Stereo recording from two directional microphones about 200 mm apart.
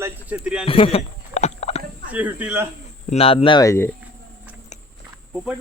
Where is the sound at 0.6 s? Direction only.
25° left (ahead or behind).